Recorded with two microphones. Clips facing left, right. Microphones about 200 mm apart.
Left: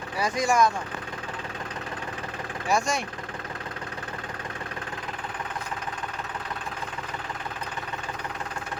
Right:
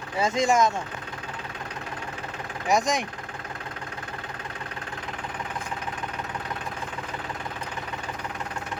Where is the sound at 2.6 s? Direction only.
20° right (ahead or behind).